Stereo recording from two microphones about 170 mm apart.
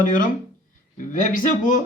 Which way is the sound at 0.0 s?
55° left (ahead or behind).